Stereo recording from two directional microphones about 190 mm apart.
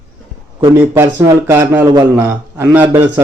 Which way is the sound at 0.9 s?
15° right (ahead or behind).